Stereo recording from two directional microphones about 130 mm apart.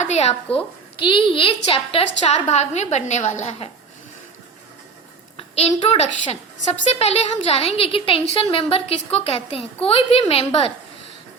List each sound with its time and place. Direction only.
0.0 s a sound: 60° left (ahead or behind)
0.5 s a woman's voice: 45° left (ahead or behind)
5.4 s a woman's voice: 50° left (ahead or behind)